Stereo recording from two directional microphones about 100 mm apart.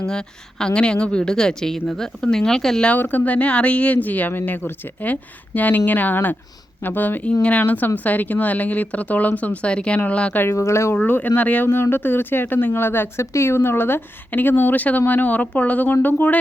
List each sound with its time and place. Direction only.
0.0 s a woman's voice: 10° left (ahead or behind)
10.4 s speech: 30° left (ahead or behind)
10.9 s speech: 20° left (ahead or behind)